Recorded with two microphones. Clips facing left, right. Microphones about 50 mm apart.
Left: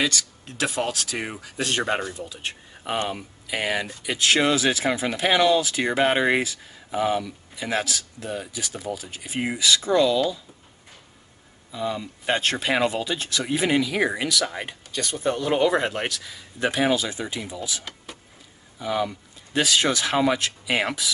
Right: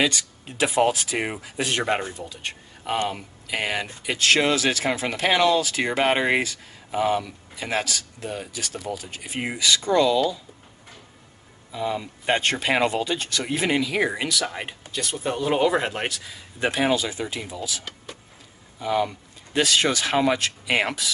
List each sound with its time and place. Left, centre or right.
0.0 s speech: centre
1.6 s speech: centre
3.4 s speech: centre
11.7 s speech: centre